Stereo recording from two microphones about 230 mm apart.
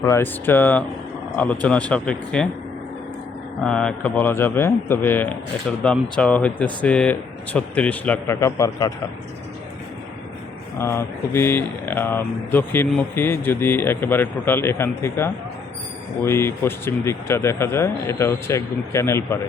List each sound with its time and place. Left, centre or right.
0.0 s speech: centre
3.6 s speech: centre
10.8 s speech: centre